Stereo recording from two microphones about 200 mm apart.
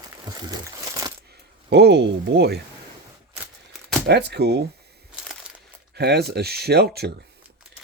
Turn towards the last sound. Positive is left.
turn(degrees=-55)  # may be behind; listen again after turning